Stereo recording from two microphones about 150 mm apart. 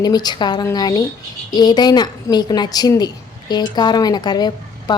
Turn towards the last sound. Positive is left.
turn(degrees=30)  # may be behind; listen again after turning